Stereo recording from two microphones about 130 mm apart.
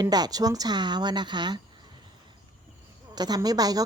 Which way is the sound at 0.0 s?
30° right (ahead or behind).